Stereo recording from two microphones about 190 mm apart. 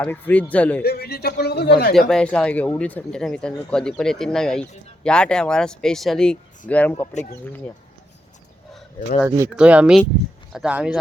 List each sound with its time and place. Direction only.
0.0 s speech: 10° left (ahead or behind)
0.8 s a man's voice: 55° left (ahead or behind)
2.0 s speech: 5° left (ahead or behind)
7.1 s speech: 40° left (ahead or behind)
9.5 s speech: 5° right (ahead or behind)